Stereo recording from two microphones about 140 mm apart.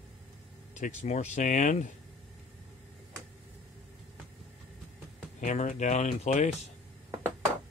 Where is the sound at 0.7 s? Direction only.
60° left (ahead or behind).